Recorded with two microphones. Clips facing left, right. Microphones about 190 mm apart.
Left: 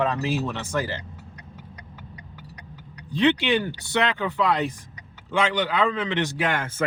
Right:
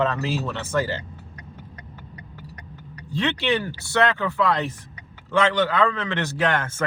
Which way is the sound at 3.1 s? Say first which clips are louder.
Left 3 dB; 15° left (ahead or behind).